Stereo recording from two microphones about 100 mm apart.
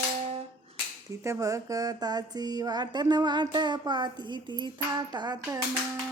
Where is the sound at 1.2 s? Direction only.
30° right (ahead or behind).